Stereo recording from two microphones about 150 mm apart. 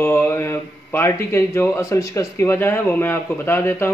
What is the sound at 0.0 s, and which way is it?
A man's voice, 15° left (ahead or behind).